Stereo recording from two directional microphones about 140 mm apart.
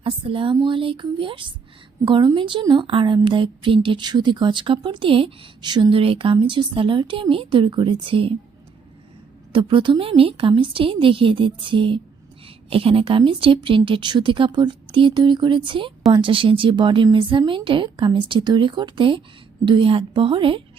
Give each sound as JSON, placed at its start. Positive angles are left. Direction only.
{"t": 0.0, "sound": "speech", "side_deg": -40}
{"t": 9.5, "sound": "speech", "side_deg": -35}